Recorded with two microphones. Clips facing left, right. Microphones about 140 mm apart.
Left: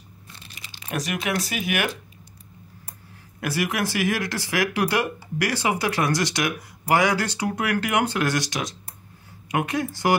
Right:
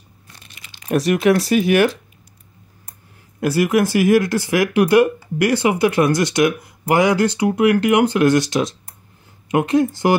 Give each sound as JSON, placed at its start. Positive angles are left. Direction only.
{"t": 0.8, "sound": "speech", "side_deg": -40}
{"t": 3.3, "sound": "speech", "side_deg": -25}